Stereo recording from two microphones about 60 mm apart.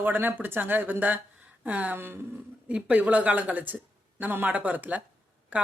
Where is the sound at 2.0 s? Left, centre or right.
Right.